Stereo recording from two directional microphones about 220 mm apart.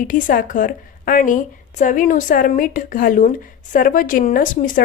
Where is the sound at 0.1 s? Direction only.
40° left (ahead or behind).